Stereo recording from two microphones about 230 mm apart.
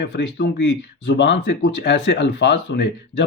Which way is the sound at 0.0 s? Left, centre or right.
Left.